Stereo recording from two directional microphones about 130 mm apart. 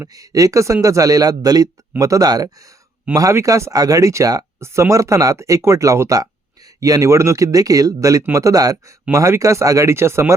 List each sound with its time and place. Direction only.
0.0 s speech: 25° right (ahead or behind)